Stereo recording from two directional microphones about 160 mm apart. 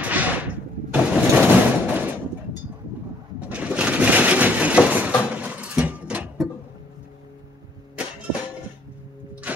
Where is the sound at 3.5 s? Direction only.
10° right (ahead or behind).